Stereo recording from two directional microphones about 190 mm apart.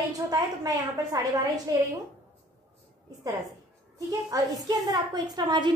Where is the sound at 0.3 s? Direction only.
20° right (ahead or behind).